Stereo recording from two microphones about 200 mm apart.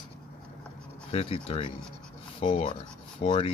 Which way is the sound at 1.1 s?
30° left (ahead or behind).